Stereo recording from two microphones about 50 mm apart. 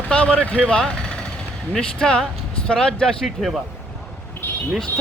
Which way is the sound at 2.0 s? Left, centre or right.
Centre.